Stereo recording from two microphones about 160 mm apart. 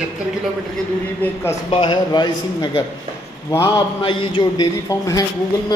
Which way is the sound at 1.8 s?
25° left (ahead or behind).